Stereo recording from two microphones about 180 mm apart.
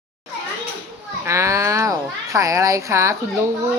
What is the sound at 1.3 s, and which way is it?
Speech, 15° right (ahead or behind).